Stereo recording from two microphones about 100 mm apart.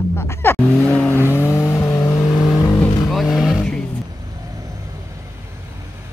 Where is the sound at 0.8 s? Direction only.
15° left (ahead or behind); by 2.3 s 30° left (ahead or behind).